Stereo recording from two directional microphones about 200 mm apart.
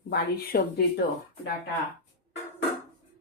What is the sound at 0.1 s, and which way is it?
Speech, 50° left (ahead or behind).